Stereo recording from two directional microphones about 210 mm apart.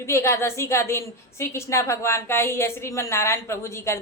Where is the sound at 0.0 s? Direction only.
15° left (ahead or behind).